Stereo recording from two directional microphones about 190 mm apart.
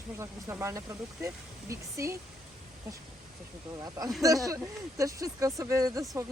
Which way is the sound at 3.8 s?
20° right (ahead or behind).